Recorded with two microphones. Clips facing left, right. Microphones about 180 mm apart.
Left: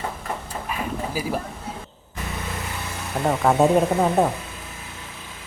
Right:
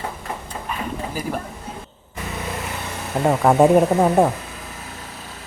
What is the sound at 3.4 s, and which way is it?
Speech, 10° right (ahead or behind).